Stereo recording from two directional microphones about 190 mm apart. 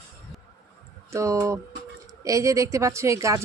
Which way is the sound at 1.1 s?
15° right (ahead or behind).